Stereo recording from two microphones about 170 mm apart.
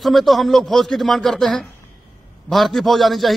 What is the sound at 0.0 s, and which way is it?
A man's voice, centre (ahead or behind).